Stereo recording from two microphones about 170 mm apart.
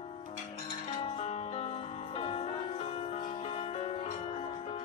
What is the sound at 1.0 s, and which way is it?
Music, 40° left (ahead or behind).